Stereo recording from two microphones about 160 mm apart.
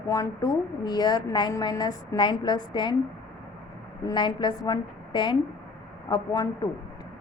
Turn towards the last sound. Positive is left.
turn(degrees=20)  # may be behind; listen again after turning